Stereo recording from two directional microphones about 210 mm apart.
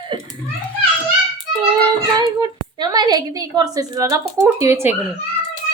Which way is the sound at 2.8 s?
20° right (ahead or behind).